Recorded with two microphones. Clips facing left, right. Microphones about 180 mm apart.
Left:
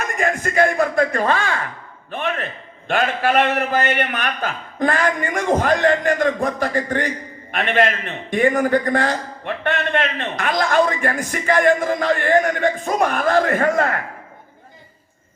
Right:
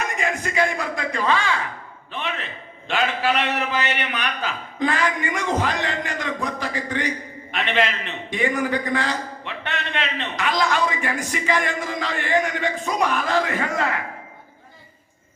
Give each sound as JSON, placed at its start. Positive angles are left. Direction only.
{"t": 0.0, "sound": "a man's voice", "side_deg": 50}